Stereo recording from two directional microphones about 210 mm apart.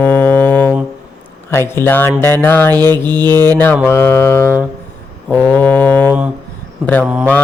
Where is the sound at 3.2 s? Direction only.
20° right (ahead or behind).